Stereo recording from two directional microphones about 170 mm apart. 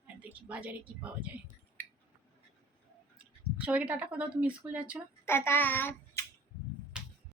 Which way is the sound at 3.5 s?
10° right (ahead or behind).